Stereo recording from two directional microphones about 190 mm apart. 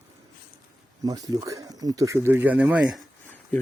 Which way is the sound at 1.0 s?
20° right (ahead or behind).